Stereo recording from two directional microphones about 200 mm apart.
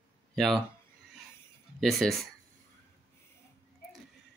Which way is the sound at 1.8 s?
Centre (ahead or behind).